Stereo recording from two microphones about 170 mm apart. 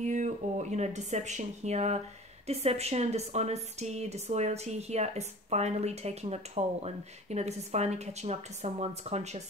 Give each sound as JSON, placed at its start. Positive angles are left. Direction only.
{"t": 0.0, "sound": "speech", "side_deg": -45}